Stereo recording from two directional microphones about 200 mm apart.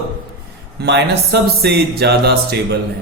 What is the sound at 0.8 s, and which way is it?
Speech, 55° right (ahead or behind).